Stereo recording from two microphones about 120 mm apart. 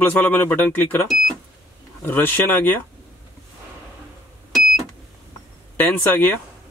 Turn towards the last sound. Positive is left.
turn(degrees=15)  # may be behind; listen again after turning